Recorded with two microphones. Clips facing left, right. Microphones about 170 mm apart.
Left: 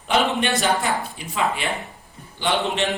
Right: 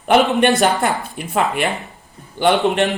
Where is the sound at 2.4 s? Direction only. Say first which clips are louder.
Right 7 dB; 55° right (ahead or behind).